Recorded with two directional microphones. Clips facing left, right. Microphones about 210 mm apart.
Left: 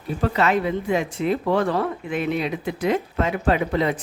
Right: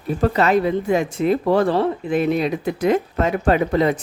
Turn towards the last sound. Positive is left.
turn(degrees=-40)  # may be behind; listen again after turning